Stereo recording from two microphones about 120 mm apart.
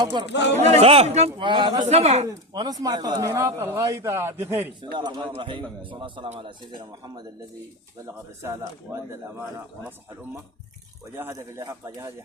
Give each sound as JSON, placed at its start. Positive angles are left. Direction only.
{"t": 0.0, "sound": "a man's voice", "side_deg": -40}
{"t": 0.5, "sound": "speech", "side_deg": -65}
{"t": 1.4, "sound": "a man's voice", "side_deg": -40}
{"t": 1.8, "sound": "speech", "side_deg": -65}
{"t": 2.2, "sound": "speech", "side_deg": -35}
{"t": 4.8, "sound": "a man's voice", "side_deg": -40}
{"t": 8.0, "sound": "speech", "side_deg": -25}
{"t": 8.9, "sound": "speech", "side_deg": -10}
{"t": 11.1, "sound": "speech", "side_deg": -20}